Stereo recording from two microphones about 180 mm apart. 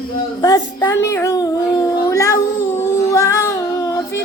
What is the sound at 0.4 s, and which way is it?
Child singing, 20° left (ahead or behind).